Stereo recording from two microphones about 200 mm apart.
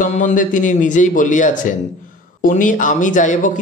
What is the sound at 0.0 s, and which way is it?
Speech, 40° left (ahead or behind).